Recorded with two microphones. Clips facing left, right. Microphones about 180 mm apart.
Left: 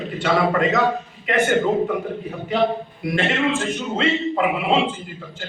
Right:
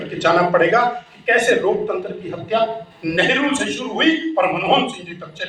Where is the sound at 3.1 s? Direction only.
80° right.